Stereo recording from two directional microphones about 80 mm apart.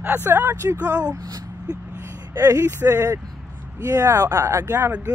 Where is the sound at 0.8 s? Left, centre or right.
Right.